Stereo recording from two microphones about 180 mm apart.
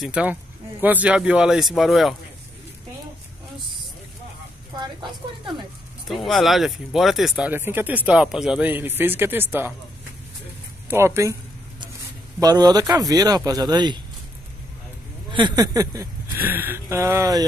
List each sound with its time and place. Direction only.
0.0 s speech: 5° right (ahead or behind)
6.0 s speech: centre (ahead or behind)
10.9 s speech: 15° right (ahead or behind)
12.4 s speech: 20° right (ahead or behind)
15.3 s speech: 25° right (ahead or behind)